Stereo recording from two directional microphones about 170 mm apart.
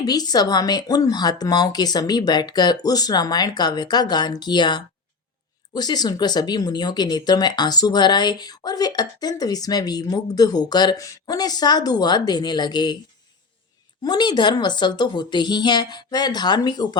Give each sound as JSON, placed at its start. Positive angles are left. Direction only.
{"t": 0.0, "sound": "speech", "side_deg": 25}
{"t": 14.0, "sound": "speech", "side_deg": 25}